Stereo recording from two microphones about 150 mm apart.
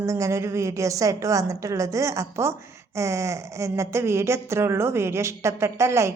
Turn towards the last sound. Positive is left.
turn(degrees=-20)  # may be behind; listen again after turning